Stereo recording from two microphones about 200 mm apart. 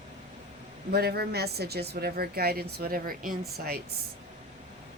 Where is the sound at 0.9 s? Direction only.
50° right (ahead or behind).